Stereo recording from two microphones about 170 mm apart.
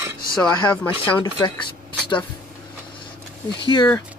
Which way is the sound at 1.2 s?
30° left (ahead or behind).